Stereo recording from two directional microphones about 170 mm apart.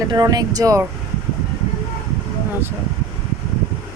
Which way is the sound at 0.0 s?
20° right (ahead or behind).